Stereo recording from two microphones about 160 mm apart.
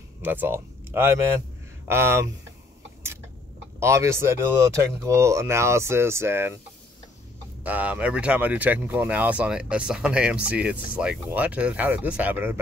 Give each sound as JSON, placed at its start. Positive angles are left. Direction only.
{"t": 0.2, "sound": "speech", "side_deg": -10}
{"t": 3.8, "sound": "speech", "side_deg": -15}
{"t": 7.6, "sound": "speech", "side_deg": -10}